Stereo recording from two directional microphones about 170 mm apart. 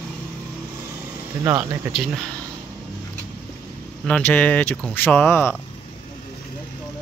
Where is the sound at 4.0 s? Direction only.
10° left (ahead or behind).